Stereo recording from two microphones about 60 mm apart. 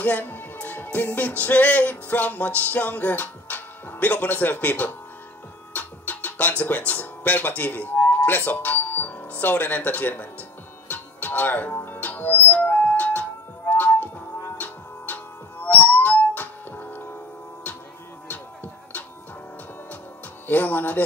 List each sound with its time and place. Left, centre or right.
0.0 s speech: left
5.8 s music: left
6.9 s speech: left
8.2 s music: left
9.3 s speech: left
10.9 s music: left
15.1 s music: left
18.3 s music: left
20.4 s speech: left